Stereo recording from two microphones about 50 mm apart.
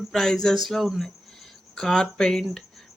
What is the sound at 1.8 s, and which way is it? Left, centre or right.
Speech, centre.